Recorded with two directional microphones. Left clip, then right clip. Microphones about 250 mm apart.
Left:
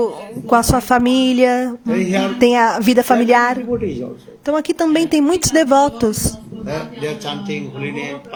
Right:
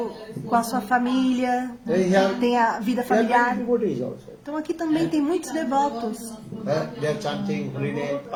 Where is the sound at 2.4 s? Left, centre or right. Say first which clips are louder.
Left 8 dB; left.